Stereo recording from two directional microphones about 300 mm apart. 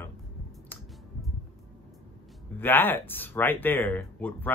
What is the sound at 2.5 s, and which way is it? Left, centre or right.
Speech, centre.